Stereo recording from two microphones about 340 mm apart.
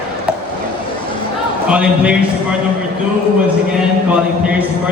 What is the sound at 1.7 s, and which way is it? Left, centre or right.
Speech, centre.